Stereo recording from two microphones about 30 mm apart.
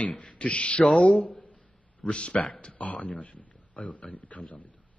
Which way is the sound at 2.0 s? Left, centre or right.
Left.